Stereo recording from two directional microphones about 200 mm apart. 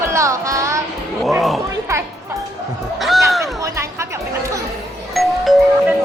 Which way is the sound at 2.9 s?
Centre (ahead or behind).